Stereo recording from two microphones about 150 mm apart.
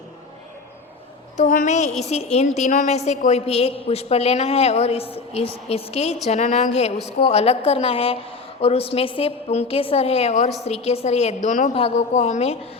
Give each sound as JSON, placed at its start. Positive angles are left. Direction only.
{"t": 1.4, "sound": "a woman's voice", "side_deg": 55}